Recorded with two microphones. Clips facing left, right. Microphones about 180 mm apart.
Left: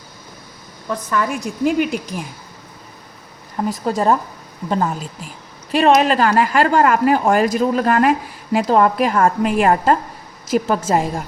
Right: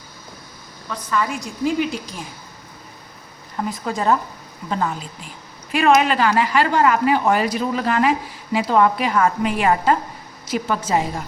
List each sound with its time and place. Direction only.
1.1 s a woman's voice: 55° left (ahead or behind)
3.7 s a woman's voice: 40° left (ahead or behind)